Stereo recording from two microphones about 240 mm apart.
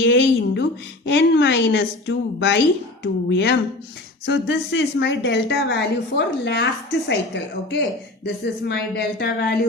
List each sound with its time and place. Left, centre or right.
0.0 s a woman's voice: left